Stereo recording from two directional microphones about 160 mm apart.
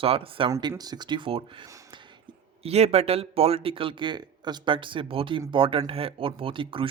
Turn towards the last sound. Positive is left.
turn(degrees=-30)  # may be behind; listen again after turning